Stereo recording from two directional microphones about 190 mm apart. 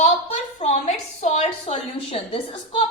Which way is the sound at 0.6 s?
35° left (ahead or behind).